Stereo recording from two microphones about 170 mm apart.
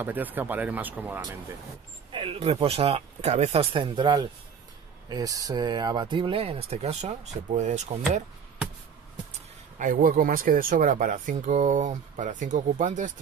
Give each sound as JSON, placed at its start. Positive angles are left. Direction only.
{"t": 0.0, "sound": "speech", "side_deg": -10}
{"t": 2.1, "sound": "speech", "side_deg": -35}
{"t": 9.8, "sound": "speech", "side_deg": -50}